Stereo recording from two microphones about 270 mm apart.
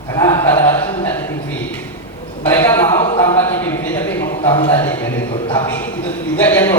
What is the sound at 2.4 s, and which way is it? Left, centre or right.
A man's voice, centre.